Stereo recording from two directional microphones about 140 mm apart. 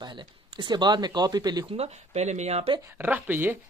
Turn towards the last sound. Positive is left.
turn(degrees=-15)  # may be behind; listen again after turning